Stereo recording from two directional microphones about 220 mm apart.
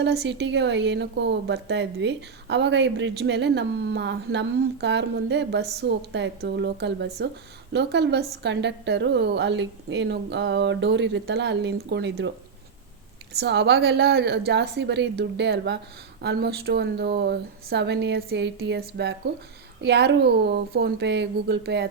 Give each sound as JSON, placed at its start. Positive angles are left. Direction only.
{"t": 0.0, "sound": "a woman's voice", "side_deg": -50}
{"t": 13.3, "sound": "a woman's voice", "side_deg": -50}